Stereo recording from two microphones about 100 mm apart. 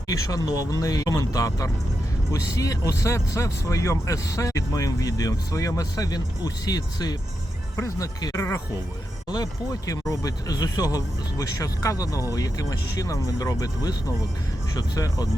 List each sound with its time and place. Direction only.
0.1 s speech: 40° left (ahead or behind)